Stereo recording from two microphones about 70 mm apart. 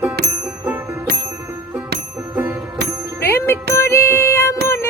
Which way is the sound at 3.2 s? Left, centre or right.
Left.